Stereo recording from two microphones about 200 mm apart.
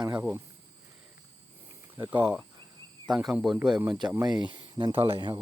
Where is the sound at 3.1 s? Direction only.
5° right (ahead or behind); by 5.4 s 25° right (ahead or behind).